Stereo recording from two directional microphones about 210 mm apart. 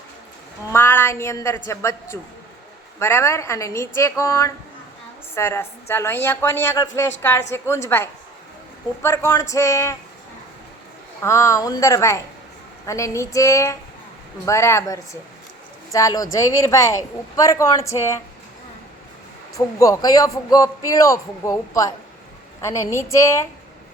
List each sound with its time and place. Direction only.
0.7 s a woman's voice: 10° left (ahead or behind)
11.2 s a woman's voice: 15° left (ahead or behind)
19.5 s a woman's voice: 15° left (ahead or behind)